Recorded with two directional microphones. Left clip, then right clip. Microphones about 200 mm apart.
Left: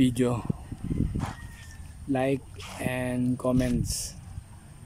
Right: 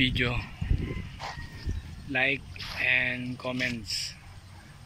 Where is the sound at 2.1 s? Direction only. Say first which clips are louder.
Right 1 dB; 30° left (ahead or behind).